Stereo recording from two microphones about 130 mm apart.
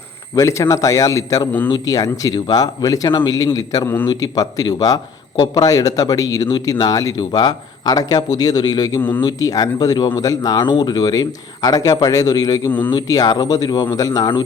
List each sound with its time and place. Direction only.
0.3 s a man's voice: 25° left (ahead or behind)
9.0 s speech: 15° left (ahead or behind)
9.2 s a man's voice: 30° left (ahead or behind)